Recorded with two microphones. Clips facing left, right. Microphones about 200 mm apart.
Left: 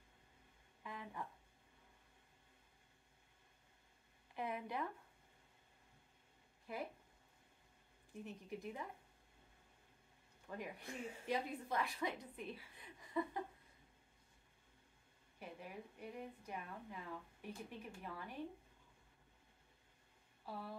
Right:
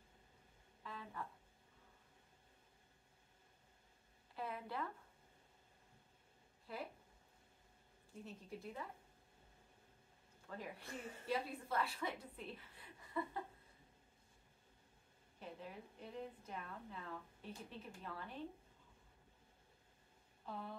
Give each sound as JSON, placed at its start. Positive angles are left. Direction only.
{"t": 0.8, "sound": "a sound", "side_deg": 15}
{"t": 4.4, "sound": "a woman's voice", "side_deg": 15}
{"t": 6.7, "sound": "a woman's voice", "side_deg": 15}
{"t": 8.1, "sound": "a woman's voice", "side_deg": 15}
{"t": 10.5, "sound": "a woman's voice", "side_deg": 15}
{"t": 15.3, "sound": "a woman's voice", "side_deg": 10}
{"t": 20.4, "sound": "a sound", "side_deg": 5}